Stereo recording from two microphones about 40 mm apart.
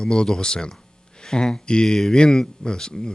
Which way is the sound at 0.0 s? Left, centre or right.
Left.